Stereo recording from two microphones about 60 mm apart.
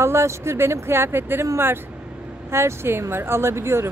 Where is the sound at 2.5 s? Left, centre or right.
Right.